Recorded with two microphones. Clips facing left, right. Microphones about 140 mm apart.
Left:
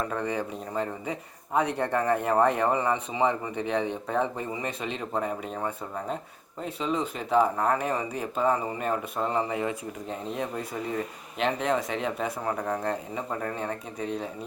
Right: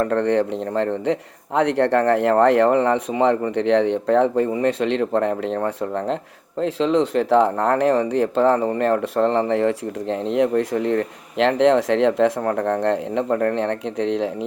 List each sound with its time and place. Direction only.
0.0 s speech: 70° right (ahead or behind)
6.6 s speech: 90° right